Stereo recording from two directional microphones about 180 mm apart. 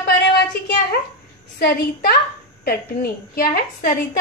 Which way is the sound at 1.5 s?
55° left (ahead or behind).